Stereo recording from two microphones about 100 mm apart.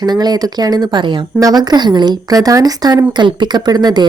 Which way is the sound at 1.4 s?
40° right (ahead or behind).